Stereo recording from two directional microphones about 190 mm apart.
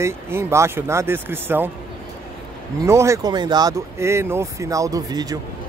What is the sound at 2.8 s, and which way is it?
Speech, 15° right (ahead or behind).